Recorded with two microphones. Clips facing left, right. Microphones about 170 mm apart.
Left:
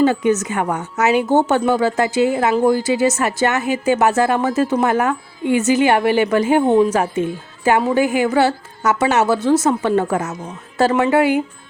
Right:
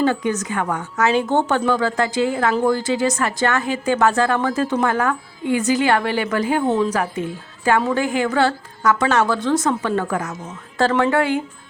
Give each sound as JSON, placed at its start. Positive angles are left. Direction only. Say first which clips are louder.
{"t": 0.0, "sound": "a woman's voice", "louder": "left 4 dB", "side_deg": 15}